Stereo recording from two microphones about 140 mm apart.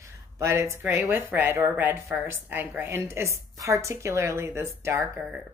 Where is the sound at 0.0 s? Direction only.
20° right (ahead or behind).